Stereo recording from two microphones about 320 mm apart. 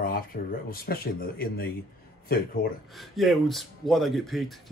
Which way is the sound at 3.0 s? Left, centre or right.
Centre.